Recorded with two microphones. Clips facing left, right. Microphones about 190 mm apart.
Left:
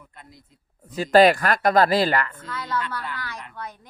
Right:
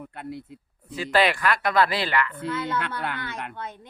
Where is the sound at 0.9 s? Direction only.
40° left (ahead or behind).